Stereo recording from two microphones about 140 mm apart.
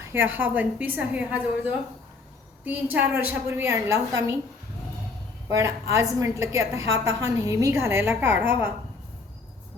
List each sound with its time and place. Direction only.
0.1 s a woman's voice: 15° right (ahead or behind)
5.5 s a woman's voice: 20° right (ahead or behind)